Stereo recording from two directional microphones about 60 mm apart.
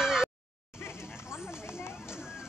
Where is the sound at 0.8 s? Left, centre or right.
Left.